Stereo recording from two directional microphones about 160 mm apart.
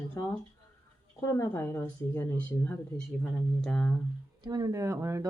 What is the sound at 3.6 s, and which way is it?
Speech, 5° left (ahead or behind).